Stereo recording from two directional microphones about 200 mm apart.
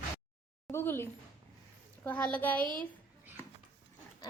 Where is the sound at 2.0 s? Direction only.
5° left (ahead or behind).